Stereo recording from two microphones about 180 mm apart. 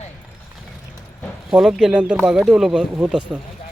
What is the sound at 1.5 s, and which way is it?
Speech, 5° right (ahead or behind).